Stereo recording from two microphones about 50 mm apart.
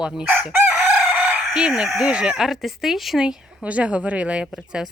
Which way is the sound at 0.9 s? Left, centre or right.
Right.